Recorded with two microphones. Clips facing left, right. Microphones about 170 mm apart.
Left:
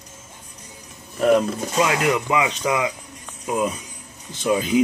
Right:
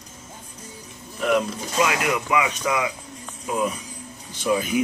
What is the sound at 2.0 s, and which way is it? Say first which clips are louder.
Speech: left 2 dB; 25° left (ahead or behind).